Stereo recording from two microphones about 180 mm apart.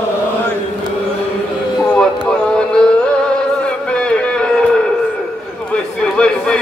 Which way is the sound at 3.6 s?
5° left (ahead or behind).